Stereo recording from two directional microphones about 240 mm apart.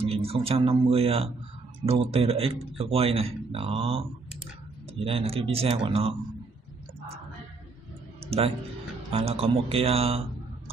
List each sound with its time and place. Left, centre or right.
0.0 s speech: right
5.0 s speech: right
9.1 s speech: right